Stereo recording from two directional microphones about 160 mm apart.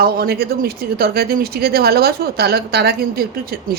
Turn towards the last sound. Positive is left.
turn(degrees=-90)